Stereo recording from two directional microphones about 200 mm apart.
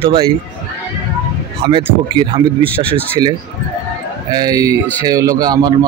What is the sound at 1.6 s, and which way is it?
Speech, 25° right (ahead or behind).